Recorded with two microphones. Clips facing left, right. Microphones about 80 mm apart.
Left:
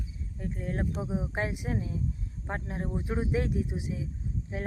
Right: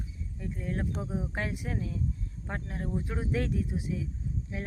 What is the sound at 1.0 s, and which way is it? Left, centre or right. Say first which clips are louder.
Speech: left 2 dB; centre.